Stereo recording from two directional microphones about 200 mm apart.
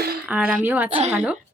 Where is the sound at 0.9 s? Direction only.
35° right (ahead or behind).